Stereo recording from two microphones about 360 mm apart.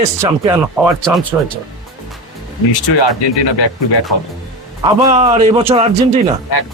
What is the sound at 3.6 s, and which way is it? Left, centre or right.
Speech, left.